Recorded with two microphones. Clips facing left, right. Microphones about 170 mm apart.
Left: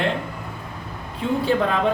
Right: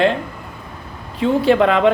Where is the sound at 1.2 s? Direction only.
90° right.